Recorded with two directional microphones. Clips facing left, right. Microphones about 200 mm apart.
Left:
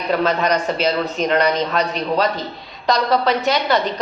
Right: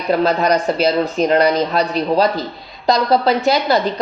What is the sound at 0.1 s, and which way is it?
A woman's voice, 35° right (ahead or behind).